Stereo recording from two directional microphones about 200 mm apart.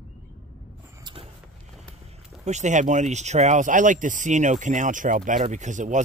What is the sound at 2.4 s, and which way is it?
Speech, 35° right (ahead or behind).